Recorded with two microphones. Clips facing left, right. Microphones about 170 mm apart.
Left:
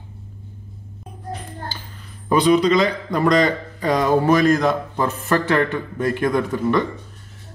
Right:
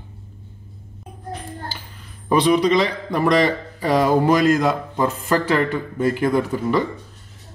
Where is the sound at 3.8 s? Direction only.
10° right (ahead or behind).